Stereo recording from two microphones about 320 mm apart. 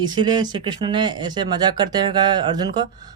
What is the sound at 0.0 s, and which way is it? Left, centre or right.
Speech, centre.